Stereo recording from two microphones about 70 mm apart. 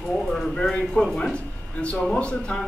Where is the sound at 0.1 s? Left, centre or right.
Centre.